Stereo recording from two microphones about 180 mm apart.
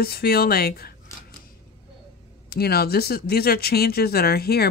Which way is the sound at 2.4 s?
60° left (ahead or behind).